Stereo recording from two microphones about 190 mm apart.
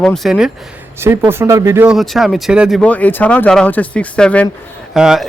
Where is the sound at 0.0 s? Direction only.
Centre (ahead or behind).